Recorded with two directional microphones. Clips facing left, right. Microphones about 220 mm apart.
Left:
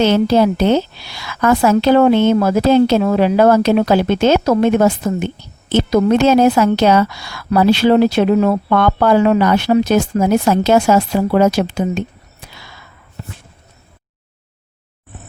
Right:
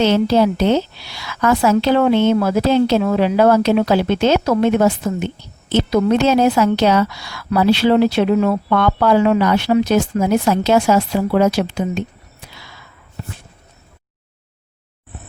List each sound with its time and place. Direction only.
0.0 s a woman's voice: 50° left (ahead or behind)